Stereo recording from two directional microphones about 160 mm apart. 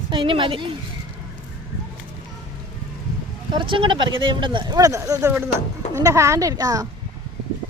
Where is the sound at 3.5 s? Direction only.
30° right (ahead or behind).